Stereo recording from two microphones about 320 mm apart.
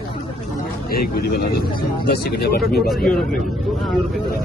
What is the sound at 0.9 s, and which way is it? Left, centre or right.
Speech, left.